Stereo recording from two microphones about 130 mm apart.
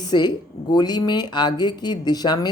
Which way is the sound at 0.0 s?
35° left (ahead or behind).